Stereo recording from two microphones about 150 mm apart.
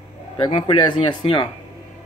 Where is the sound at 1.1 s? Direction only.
35° left (ahead or behind).